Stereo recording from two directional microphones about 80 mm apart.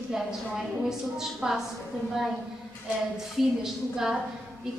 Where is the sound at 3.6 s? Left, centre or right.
Centre.